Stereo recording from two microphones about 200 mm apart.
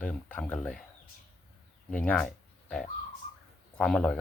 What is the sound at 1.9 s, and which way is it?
Speech, 5° left (ahead or behind).